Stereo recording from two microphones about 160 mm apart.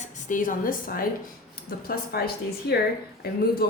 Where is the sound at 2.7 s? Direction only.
90° left.